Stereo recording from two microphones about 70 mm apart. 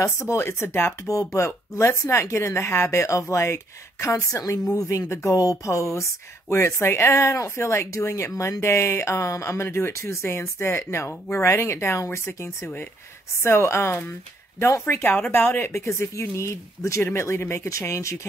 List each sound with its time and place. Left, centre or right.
0.0 s speech: left
1.0 s speech: left
5.3 s speech: left